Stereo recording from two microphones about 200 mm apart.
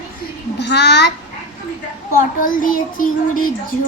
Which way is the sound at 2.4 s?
45° left (ahead or behind).